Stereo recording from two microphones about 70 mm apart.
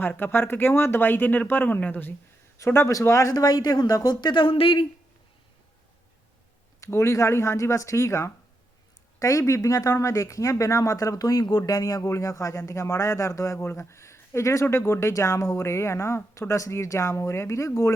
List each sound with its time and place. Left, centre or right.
0.0 s speech: left
2.6 s speech: left
3.3 s speech: left
6.7 s speech: left